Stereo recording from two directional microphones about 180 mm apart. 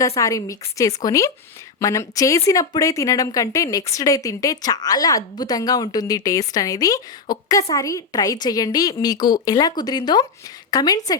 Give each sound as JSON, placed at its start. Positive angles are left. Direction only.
{"t": 0.2, "sound": "speech", "side_deg": 20}